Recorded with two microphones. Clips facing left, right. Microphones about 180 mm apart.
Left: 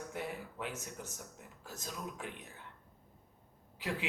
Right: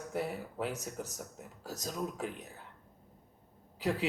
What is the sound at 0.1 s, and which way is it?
A man's voice, 40° right (ahead or behind).